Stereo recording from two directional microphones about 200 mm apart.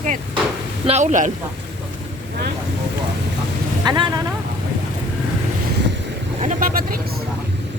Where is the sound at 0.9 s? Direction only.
35° right (ahead or behind).